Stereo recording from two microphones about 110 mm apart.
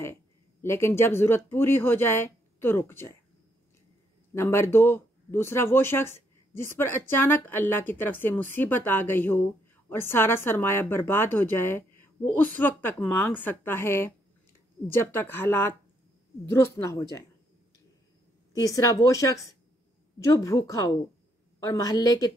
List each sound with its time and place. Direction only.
0.0 s speech: 20° left (ahead or behind)
4.3 s speech: 25° left (ahead or behind)
18.6 s speech: 30° left (ahead or behind)